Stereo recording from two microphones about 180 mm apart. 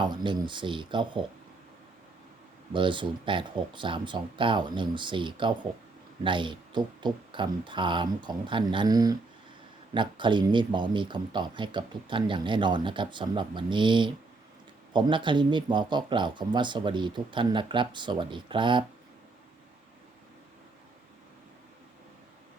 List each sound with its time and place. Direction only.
0.0 s speech: 25° right (ahead or behind)
2.7 s speech: 25° right (ahead or behind)